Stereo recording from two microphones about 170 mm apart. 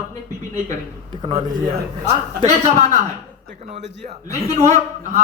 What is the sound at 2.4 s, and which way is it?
A man's voice, 40° right (ahead or behind).